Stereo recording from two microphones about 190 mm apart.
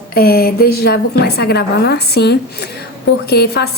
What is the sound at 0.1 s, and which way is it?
Speech, 55° left (ahead or behind).